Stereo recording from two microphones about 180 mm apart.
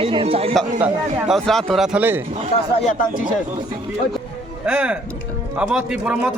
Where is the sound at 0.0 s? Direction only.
30° right (ahead or behind).